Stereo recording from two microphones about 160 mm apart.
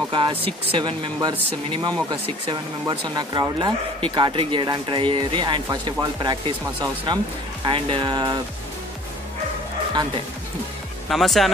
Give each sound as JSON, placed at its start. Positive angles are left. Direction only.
{"t": 0.1, "sound": "speech", "side_deg": -35}
{"t": 11.1, "sound": "speech", "side_deg": 0}